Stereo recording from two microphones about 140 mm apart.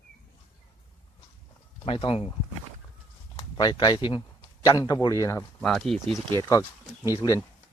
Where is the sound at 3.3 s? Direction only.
30° left (ahead or behind).